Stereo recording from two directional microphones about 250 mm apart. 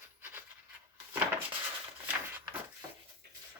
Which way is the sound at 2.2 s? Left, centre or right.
Centre.